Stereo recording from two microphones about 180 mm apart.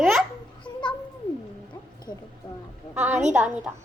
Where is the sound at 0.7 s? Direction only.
25° left (ahead or behind).